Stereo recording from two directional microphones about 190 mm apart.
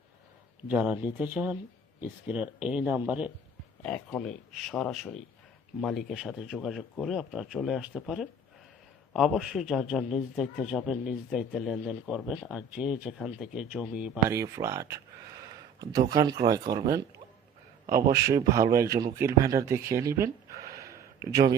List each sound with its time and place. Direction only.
0.7 s speech: 5° right (ahead or behind)
3.8 s a man's voice: 5° left (ahead or behind)
14.3 s speech: 15° right (ahead or behind)
18.1 s speech: 20° right (ahead or behind)
20.7 s a sound: 15° right (ahead or behind)